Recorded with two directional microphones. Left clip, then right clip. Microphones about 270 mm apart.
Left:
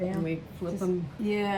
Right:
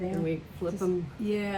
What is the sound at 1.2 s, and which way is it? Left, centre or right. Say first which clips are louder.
Speech: left 3 dB; left.